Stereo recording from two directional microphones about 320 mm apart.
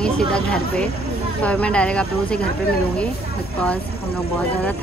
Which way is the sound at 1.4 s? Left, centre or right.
Centre.